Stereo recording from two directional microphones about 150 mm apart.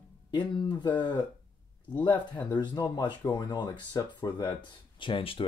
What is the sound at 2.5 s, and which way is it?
Speech, 30° left (ahead or behind).